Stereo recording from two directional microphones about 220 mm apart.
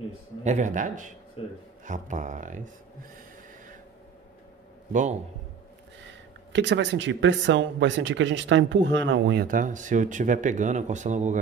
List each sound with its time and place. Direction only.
0.4 s speech: 35° right (ahead or behind)
6.5 s speech: 55° right (ahead or behind); by 11.3 s 35° right (ahead or behind)